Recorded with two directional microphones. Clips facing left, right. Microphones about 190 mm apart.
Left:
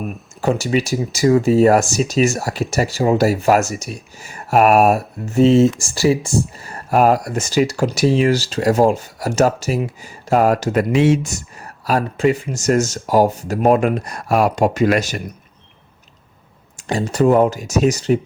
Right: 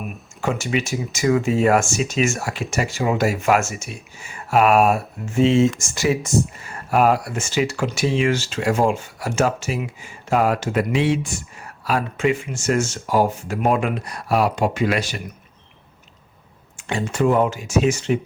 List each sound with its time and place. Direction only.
0.4 s speech: 35° left (ahead or behind)
16.7 s speech: 40° left (ahead or behind)